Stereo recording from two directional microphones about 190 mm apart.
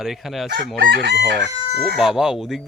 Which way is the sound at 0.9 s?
65° right (ahead or behind).